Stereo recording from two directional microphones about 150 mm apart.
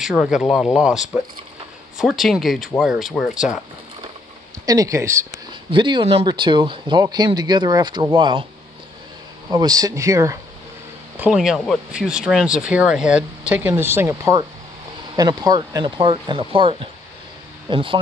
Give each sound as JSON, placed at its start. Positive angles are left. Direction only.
{"t": 0.0, "sound": "speech", "side_deg": -5}
{"t": 4.6, "sound": "speech", "side_deg": -20}
{"t": 5.5, "sound": "speech", "side_deg": -30}
{"t": 9.5, "sound": "speech", "side_deg": -25}
{"t": 11.1, "sound": "speech", "side_deg": -5}